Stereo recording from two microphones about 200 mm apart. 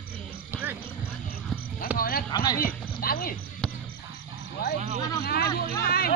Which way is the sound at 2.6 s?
45° left (ahead or behind).